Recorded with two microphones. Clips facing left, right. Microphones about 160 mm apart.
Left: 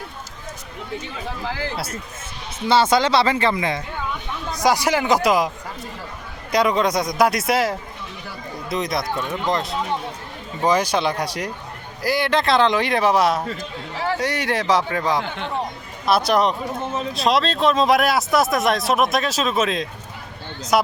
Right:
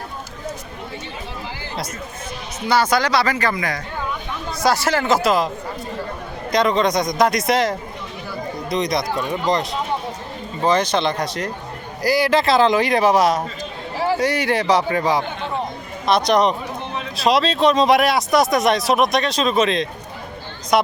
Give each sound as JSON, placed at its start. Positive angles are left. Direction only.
{"t": 1.7, "sound": "a man's voice", "side_deg": 10}
{"t": 2.6, "sound": "a man's voice", "side_deg": 25}
{"t": 6.5, "sound": "a man's voice", "side_deg": 10}
{"t": 12.0, "sound": "speech", "side_deg": 0}
{"t": 16.8, "sound": "a sound", "side_deg": 40}
{"t": 17.2, "sound": "speech", "side_deg": 0}